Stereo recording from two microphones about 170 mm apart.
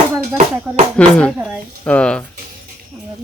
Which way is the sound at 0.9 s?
5° left (ahead or behind).